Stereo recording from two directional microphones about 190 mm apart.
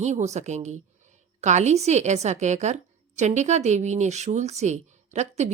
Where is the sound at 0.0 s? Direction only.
35° right (ahead or behind).